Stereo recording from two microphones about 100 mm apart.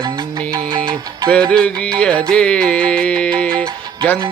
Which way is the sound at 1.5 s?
10° left (ahead or behind).